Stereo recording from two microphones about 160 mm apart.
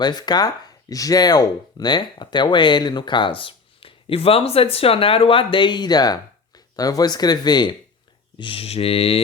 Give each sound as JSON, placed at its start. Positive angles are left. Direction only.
{"t": 0.0, "sound": "speech", "side_deg": 25}
{"t": 8.4, "sound": "mantra", "side_deg": 35}